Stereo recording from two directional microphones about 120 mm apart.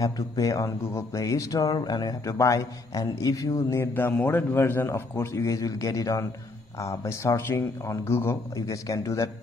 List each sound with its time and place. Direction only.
0.0 s speech: 30° left (ahead or behind)